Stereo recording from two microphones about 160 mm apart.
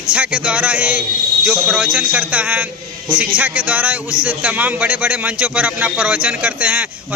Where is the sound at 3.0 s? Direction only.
30° right (ahead or behind).